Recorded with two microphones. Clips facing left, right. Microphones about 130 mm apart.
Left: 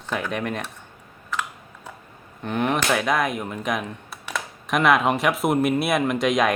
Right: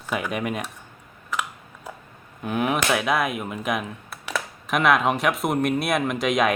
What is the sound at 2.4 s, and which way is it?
Speech, 5° right (ahead or behind).